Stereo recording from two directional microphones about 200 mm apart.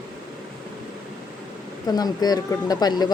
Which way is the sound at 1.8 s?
20° left (ahead or behind).